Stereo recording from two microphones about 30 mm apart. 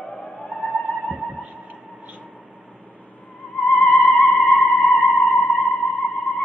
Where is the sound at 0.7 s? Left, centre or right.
Left.